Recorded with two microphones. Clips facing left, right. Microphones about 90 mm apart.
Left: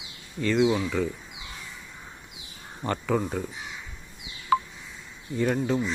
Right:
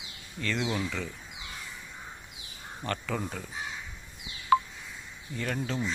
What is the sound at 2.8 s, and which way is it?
Speech, 15° left (ahead or behind).